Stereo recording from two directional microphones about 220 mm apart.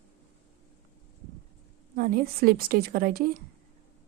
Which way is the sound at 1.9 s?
40° right (ahead or behind).